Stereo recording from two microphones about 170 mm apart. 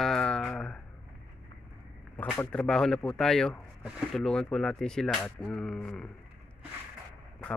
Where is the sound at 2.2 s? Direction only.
10° left (ahead or behind).